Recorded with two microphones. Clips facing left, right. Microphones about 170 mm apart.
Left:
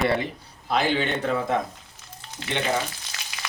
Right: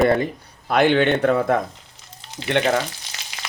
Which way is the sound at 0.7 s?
60° right (ahead or behind).